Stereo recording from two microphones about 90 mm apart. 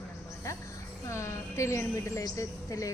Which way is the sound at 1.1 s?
35° left (ahead or behind).